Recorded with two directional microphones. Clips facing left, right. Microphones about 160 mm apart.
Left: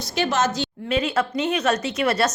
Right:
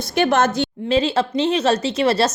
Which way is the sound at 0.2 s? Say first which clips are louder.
Right 5 dB; 55° right (ahead or behind).